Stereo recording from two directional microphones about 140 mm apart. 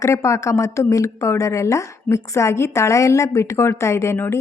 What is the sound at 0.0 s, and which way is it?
Speech, 20° left (ahead or behind).